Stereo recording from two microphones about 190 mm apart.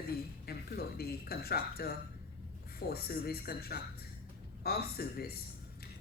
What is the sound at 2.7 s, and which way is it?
A woman's voice, 55° left (ahead or behind).